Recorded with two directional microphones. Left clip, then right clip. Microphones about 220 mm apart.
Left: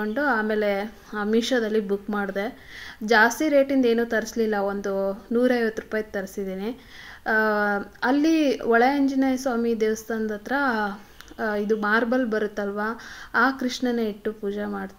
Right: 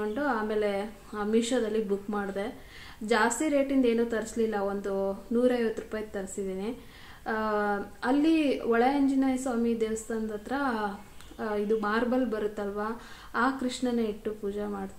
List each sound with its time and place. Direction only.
0.0 s speech: 35° left (ahead or behind)
3.0 s a woman's voice: 15° left (ahead or behind)
3.3 s speech: 35° left (ahead or behind)